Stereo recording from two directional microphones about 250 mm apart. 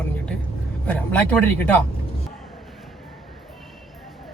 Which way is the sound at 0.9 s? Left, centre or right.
Centre.